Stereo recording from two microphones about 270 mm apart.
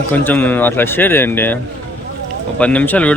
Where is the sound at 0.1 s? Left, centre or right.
Centre.